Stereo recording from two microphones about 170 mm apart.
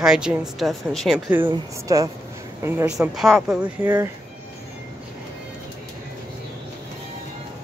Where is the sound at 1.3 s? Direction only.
15° right (ahead or behind).